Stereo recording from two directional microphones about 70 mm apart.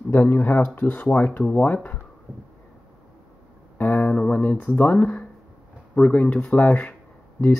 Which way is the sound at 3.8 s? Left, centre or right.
Left.